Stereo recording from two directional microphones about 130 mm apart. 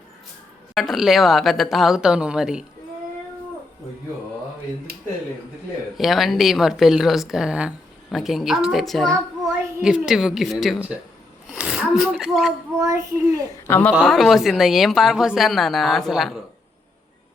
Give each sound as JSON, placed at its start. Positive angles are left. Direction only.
{"t": 0.7, "sound": "speech", "side_deg": 0}
{"t": 6.0, "sound": "a woman's voice", "side_deg": 0}
{"t": 12.8, "sound": "a child's voice", "side_deg": -25}
{"t": 13.7, "sound": "a woman's voice", "side_deg": 15}
{"t": 14.0, "sound": "speech", "side_deg": 0}